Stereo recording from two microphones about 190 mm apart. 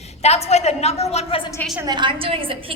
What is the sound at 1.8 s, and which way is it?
Speech, 25° right (ahead or behind).